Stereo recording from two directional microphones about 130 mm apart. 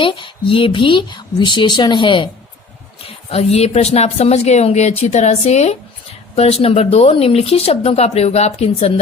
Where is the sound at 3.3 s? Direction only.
55° left (ahead or behind).